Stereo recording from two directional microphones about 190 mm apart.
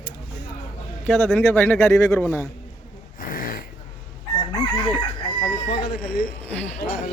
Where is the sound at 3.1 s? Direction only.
50° left (ahead or behind).